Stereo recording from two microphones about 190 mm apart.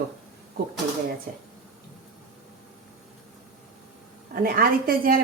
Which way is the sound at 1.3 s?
45° right (ahead or behind).